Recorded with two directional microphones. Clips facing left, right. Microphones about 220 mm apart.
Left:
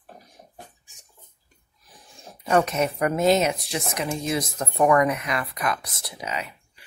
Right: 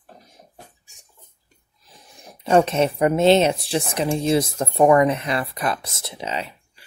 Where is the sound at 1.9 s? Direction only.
20° right (ahead or behind).